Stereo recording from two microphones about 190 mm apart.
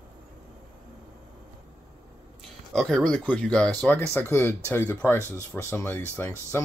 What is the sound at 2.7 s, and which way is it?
Speech, 5° left (ahead or behind).